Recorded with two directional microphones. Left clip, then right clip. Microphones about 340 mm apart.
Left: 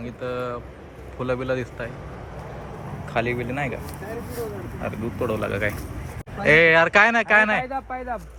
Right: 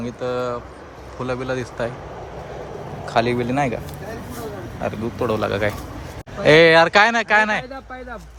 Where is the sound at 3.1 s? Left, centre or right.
Centre.